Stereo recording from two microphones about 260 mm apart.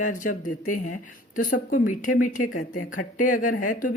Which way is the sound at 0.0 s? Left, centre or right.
Left.